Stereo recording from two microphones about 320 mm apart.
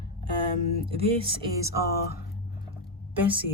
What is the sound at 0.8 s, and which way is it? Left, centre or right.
Speech, centre.